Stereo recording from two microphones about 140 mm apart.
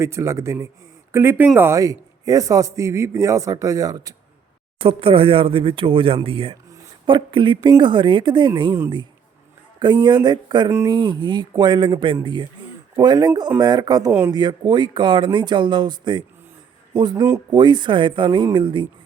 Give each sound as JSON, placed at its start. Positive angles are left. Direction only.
{"t": 0.0, "sound": "a man's voice", "side_deg": -20}
{"t": 4.8, "sound": "speech", "side_deg": -40}
{"t": 9.8, "sound": "a man's voice", "side_deg": -35}